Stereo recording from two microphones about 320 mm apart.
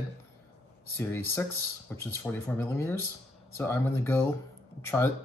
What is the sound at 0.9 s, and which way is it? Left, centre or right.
Speech, centre.